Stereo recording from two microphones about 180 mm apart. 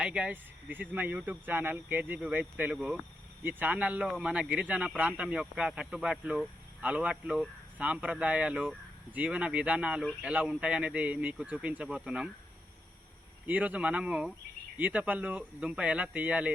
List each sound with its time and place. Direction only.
0.0 s speech: 5° right (ahead or behind)
13.5 s speech: 10° right (ahead or behind)